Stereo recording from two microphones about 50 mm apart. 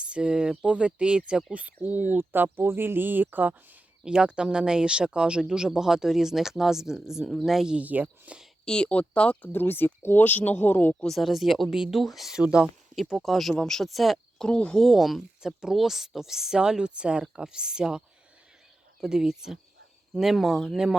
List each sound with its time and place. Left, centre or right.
0.0 s speech: centre
1.5 s speech: right
4.0 s speech: centre
7.8 s speech: right
8.6 s speech: centre
9.5 s speech: left
10.2 s speech: left
11.0 s speech: centre
15.4 s speech: centre